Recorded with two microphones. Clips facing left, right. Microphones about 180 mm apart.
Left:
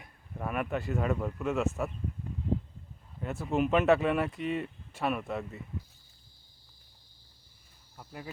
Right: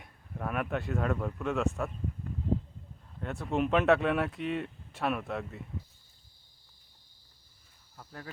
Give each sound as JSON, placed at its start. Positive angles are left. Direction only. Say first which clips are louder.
{"t": 0.0, "sound": "speech", "louder": "even", "side_deg": 0}
{"t": 3.2, "sound": "speech", "louder": "left 1 dB", "side_deg": 5}
{"t": 7.9, "sound": "speech", "louder": "left 2 dB", "side_deg": 10}